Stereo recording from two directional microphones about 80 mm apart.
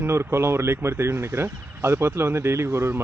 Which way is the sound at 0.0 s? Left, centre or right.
Right.